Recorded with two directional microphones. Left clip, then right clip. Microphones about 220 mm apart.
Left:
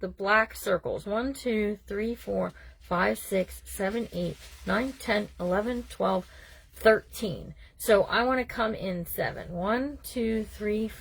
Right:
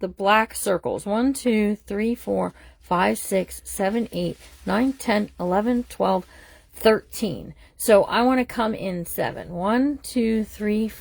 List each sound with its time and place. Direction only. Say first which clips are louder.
0.0 s a woman's voice: right 5 dB; 45° right (ahead or behind)